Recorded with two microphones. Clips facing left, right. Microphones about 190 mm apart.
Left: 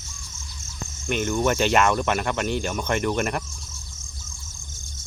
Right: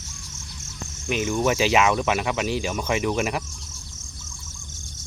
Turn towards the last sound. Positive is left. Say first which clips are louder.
# even
turn(degrees=0)  # may be behind; listen again after turning